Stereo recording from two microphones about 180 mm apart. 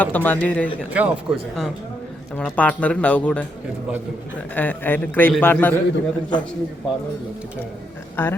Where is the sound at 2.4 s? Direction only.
5° left (ahead or behind).